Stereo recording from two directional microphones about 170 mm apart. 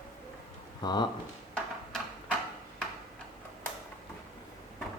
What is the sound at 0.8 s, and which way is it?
Speech, 25° left (ahead or behind).